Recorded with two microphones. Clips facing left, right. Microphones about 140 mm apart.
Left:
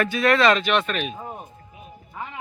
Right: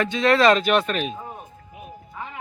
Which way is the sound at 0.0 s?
25° right (ahead or behind).